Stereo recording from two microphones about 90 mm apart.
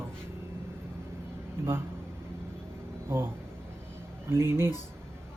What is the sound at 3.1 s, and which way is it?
Speech, 25° right (ahead or behind).